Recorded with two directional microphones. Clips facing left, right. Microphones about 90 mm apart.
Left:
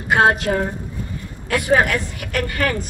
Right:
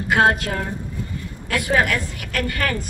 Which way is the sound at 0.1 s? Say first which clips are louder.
Left 2 dB; 20° left (ahead or behind).